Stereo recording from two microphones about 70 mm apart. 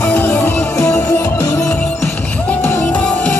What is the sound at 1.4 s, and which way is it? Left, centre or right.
Music, left.